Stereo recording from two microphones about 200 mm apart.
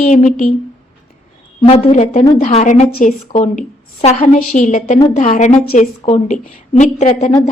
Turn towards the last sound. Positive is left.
turn(degrees=35)  # may be behind; listen again after turning